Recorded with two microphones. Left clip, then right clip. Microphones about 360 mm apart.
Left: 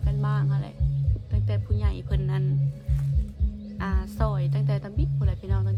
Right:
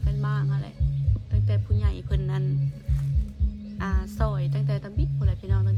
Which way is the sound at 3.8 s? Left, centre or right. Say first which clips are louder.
Even; centre.